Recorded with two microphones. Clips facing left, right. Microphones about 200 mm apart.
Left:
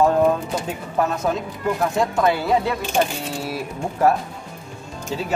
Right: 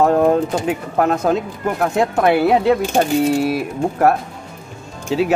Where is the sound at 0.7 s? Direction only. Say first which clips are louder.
Right 5 dB; 65° right (ahead or behind).